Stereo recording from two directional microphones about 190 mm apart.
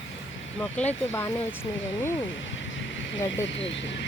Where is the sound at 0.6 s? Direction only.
5° left (ahead or behind).